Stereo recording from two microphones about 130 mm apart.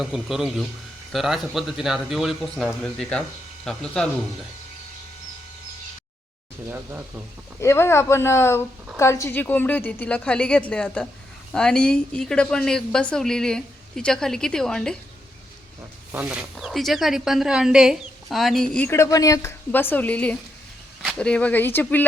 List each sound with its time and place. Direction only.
0.0 s a woman's voice: 5° right (ahead or behind)
6.7 s speech: 15° right (ahead or behind)
7.6 s a woman's voice: 20° left (ahead or behind); by 14.9 s 5° left (ahead or behind)
16.1 s a woman's voice: 10° right (ahead or behind); by 18.9 s 5° left (ahead or behind)
18.9 s a woman's voice: 20° left (ahead or behind)